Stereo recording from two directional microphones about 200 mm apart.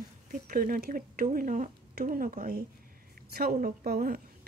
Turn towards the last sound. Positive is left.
turn(degrees=-50)  # may be behind; listen again after turning